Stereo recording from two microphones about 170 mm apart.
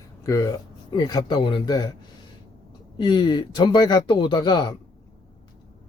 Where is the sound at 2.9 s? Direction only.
25° left (ahead or behind).